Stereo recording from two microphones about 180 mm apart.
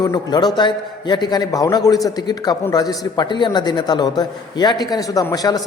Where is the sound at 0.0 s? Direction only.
25° left (ahead or behind).